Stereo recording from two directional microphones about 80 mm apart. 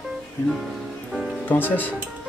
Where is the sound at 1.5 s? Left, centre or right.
Left.